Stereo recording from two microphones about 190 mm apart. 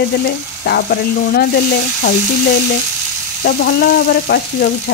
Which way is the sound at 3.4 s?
55° left (ahead or behind).